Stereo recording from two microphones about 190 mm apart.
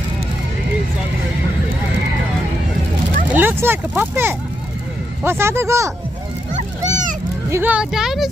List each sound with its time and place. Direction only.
3.3 s speech: 10° right (ahead or behind)
6.5 s a sound: 40° right (ahead or behind)
7.4 s speech: 10° right (ahead or behind)